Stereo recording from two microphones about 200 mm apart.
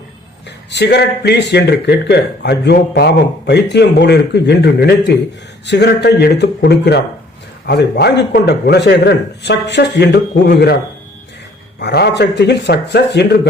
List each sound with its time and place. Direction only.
0.7 s a man's voice: 55° left (ahead or behind)
11.8 s a man's voice: 55° left (ahead or behind)